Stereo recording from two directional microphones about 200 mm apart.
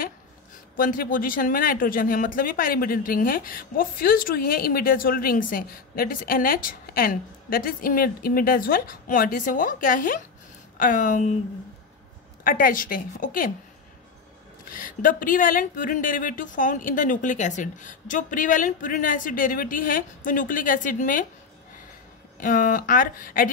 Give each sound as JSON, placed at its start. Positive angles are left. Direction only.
{"t": 0.7, "sound": "speech", "side_deg": 45}
{"t": 12.4, "sound": "speech", "side_deg": 45}
{"t": 14.7, "sound": "speech", "side_deg": 40}
{"t": 22.4, "sound": "speech", "side_deg": 40}